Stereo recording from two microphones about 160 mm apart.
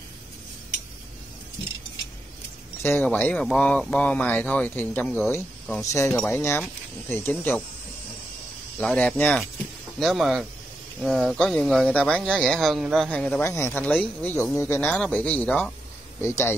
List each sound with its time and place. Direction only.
2.8 s speech: 10° left (ahead or behind)
5.8 s speech: 20° left (ahead or behind)
8.7 s speech: 10° left (ahead or behind)
9.9 s speech: centre (ahead or behind); by 16.5 s 15° left (ahead or behind)